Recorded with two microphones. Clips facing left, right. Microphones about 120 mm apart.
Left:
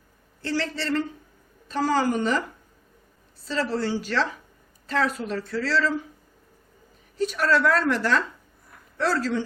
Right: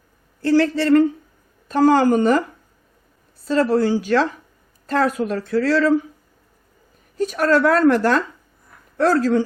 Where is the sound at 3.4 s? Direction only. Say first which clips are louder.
Right 9 dB; 50° right (ahead or behind).